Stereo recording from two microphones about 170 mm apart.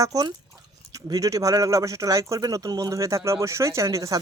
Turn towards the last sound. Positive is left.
turn(degrees=-20)  # may be behind; listen again after turning